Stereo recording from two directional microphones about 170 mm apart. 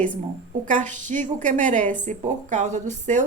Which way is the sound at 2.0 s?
45° right (ahead or behind).